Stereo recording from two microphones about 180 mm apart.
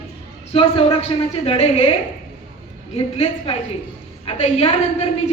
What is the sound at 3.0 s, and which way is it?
A man's voice, 35° left (ahead or behind).